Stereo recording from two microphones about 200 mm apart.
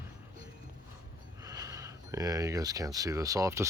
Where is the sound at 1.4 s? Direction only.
15° right (ahead or behind).